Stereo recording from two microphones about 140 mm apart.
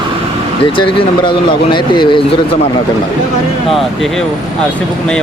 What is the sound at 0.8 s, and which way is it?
Speech, 35° left (ahead or behind).